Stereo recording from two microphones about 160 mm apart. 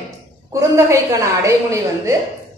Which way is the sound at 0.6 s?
20° right (ahead or behind).